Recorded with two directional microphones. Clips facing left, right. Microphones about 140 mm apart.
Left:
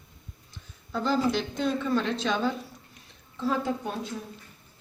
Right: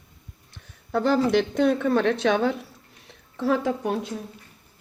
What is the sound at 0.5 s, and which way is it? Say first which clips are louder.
A woman's voice: right 7 dB; 70° right (ahead or behind).